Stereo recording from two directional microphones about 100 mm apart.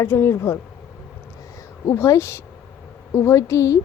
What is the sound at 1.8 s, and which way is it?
Speech, 25° left (ahead or behind).